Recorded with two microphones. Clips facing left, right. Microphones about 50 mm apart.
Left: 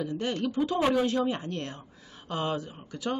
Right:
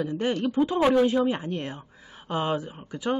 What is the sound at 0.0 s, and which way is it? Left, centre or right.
Speech, right.